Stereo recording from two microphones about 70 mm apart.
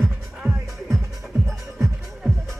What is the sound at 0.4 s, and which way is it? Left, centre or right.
Music, centre.